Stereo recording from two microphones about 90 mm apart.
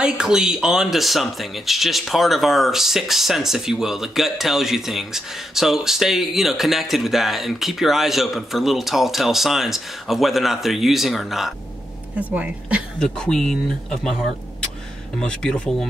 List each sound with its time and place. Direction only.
0.0 s speech: 10° right (ahead or behind)
12.2 s speech: 15° right (ahead or behind)
13.0 s speech: 5° left (ahead or behind)
15.1 s speech: 10° left (ahead or behind)